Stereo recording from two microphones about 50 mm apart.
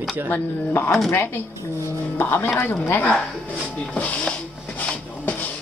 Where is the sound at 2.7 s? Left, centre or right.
Left.